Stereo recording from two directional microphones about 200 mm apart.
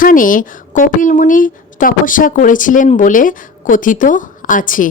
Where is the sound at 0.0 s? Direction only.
45° left (ahead or behind).